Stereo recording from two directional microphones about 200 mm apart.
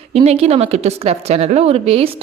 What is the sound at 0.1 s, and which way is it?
Speech, 30° right (ahead or behind).